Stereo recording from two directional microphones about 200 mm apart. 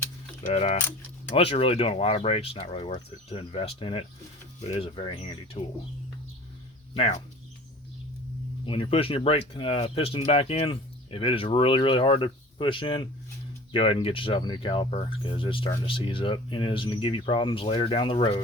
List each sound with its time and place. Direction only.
0.4 s speech: 30° left (ahead or behind)
6.9 s speech: 30° left (ahead or behind)
8.6 s speech: 25° left (ahead or behind)